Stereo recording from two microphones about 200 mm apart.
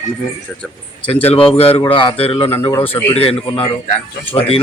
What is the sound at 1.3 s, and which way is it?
A man's voice, 30° left (ahead or behind).